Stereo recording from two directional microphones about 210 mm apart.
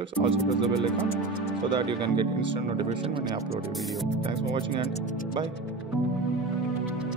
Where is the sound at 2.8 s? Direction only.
25° right (ahead or behind).